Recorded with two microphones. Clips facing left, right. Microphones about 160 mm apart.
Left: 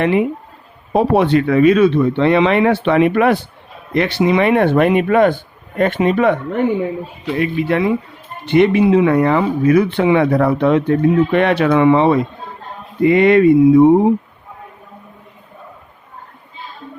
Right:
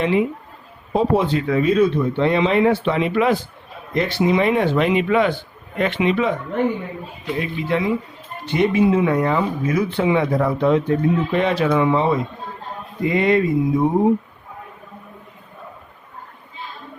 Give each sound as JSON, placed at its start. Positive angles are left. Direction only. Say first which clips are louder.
{"t": 0.0, "sound": "a man's voice", "louder": "left 3 dB", "side_deg": 60}
{"t": 3.9, "sound": "a man's voice", "louder": "left 3 dB", "side_deg": 70}
{"t": 7.3, "sound": "a man's voice", "louder": "left 6 dB", "side_deg": 65}